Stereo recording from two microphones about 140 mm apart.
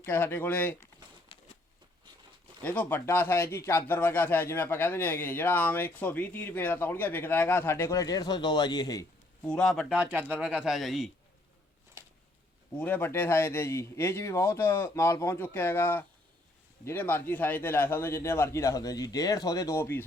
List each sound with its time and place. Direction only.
0.0 s speech: 15° left (ahead or behind)
1.3 s a sound: 35° left (ahead or behind)
2.6 s speech: 10° left (ahead or behind); by 9.0 s 30° left (ahead or behind)
9.4 s speech: 5° left (ahead or behind)
10.0 s speech: 10° right (ahead or behind)
12.8 s a man's voice: 15° left (ahead or behind)